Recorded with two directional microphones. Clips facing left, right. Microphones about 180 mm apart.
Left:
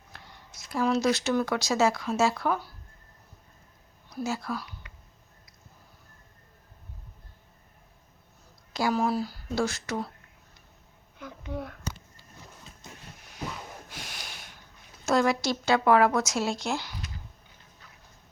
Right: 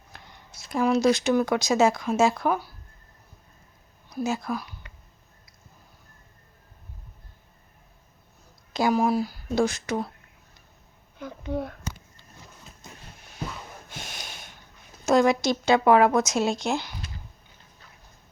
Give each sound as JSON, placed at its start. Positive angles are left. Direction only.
{"t": 0.1, "sound": "a sound", "side_deg": -15}
{"t": 0.7, "sound": "speech", "side_deg": -15}
{"t": 4.1, "sound": "speech", "side_deg": -20}
{"t": 4.8, "sound": "a sound", "side_deg": -30}
{"t": 8.7, "sound": "speech", "side_deg": -15}
{"t": 11.2, "sound": "speech", "side_deg": -30}
{"t": 13.9, "sound": "snort", "side_deg": -25}
{"t": 15.0, "sound": "speech", "side_deg": -20}